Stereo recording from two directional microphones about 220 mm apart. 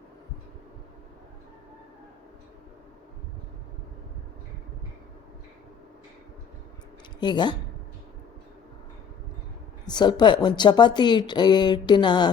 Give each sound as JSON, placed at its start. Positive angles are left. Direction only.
{"t": 7.2, "sound": "a woman's voice", "side_deg": 20}
{"t": 9.8, "sound": "a woman's voice", "side_deg": 20}